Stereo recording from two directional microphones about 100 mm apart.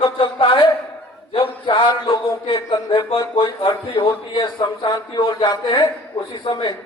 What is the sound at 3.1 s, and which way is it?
Speech, 65° left (ahead or behind).